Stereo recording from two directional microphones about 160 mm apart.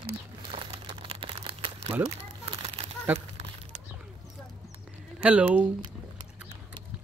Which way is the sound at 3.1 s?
40° right (ahead or behind).